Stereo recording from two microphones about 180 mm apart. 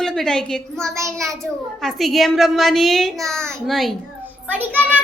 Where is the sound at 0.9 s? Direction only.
15° right (ahead or behind).